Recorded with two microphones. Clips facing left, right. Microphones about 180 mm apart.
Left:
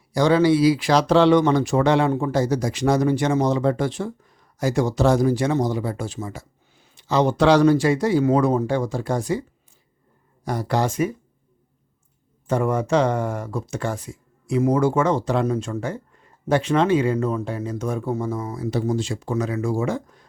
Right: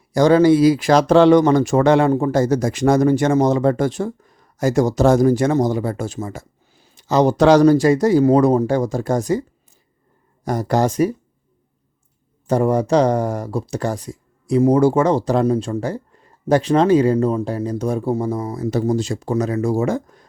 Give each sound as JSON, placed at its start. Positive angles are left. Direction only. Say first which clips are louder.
{"t": 0.1, "sound": "speech", "louder": "right 5 dB", "side_deg": -45}
{"t": 10.4, "sound": "speech", "louder": "right 5 dB", "side_deg": -45}
{"t": 12.5, "sound": "speech", "louder": "right 4 dB", "side_deg": -35}